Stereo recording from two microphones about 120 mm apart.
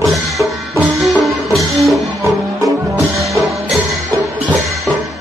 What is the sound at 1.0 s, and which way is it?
Music, centre (ahead or behind).